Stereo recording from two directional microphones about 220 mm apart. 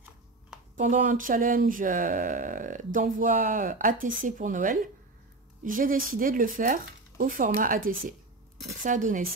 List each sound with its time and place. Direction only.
0.7 s speech: 35° right (ahead or behind)